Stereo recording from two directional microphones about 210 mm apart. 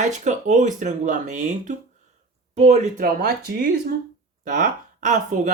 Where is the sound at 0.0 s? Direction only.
35° right (ahead or behind).